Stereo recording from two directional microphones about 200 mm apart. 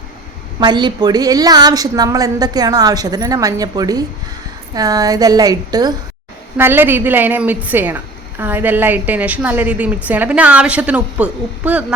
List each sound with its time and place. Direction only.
0.6 s a woman's voice: 20° right (ahead or behind)